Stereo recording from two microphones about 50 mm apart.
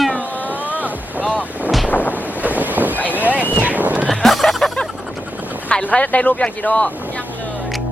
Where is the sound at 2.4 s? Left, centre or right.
Right.